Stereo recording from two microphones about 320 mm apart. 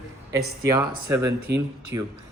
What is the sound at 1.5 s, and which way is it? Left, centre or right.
Speech, right.